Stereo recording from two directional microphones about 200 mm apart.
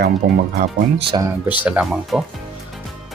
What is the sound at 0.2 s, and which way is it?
Speech, 45° right (ahead or behind).